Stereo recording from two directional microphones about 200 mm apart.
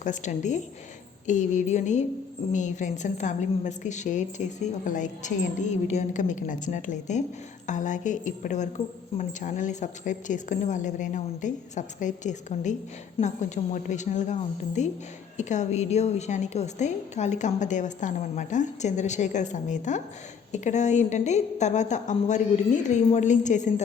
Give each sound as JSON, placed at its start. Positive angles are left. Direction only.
{"t": 0.0, "sound": "a woman's voice", "side_deg": 40}